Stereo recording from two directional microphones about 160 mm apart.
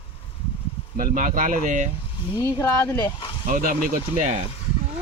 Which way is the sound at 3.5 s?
55° right (ahead or behind).